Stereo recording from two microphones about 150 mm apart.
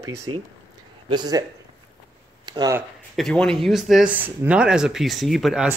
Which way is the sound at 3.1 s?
5° left (ahead or behind).